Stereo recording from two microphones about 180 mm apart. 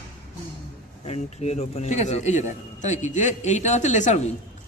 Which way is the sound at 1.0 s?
35° left (ahead or behind).